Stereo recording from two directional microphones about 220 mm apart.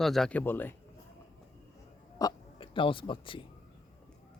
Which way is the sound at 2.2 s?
20° left (ahead or behind).